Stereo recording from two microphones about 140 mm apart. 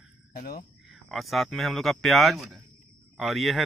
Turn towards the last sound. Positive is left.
turn(degrees=0)  # may be behind; listen again after turning